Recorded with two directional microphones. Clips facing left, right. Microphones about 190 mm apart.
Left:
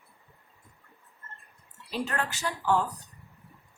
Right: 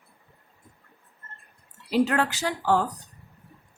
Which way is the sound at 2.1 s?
90° right.